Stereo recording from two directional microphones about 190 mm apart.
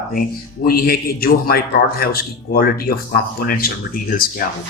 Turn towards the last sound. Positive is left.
turn(degrees=50)  # may be behind; listen again after turning